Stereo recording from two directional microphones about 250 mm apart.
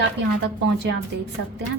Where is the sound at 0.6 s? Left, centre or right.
Right.